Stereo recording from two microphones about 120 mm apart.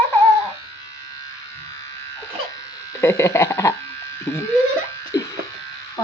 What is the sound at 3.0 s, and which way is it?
Speech, 25° left (ahead or behind).